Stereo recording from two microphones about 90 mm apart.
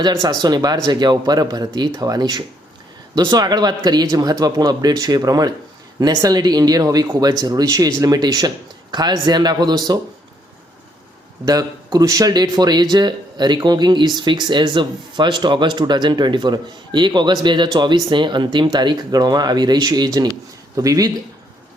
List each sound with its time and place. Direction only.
0.1 s speech: 40° right (ahead or behind)
11.4 s speech: 45° right (ahead or behind)
20.7 s speech: 40° right (ahead or behind)